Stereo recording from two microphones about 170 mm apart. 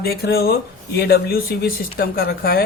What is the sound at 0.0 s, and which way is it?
Speech, 65° left (ahead or behind).